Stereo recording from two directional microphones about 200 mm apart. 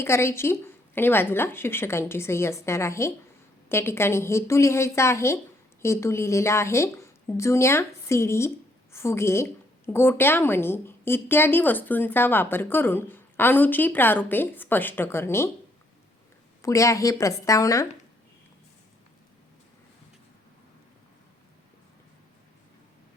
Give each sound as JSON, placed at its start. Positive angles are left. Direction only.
{"t": 0.0, "sound": "a woman's voice", "side_deg": 15}
{"t": 16.6, "sound": "a woman's voice", "side_deg": 15}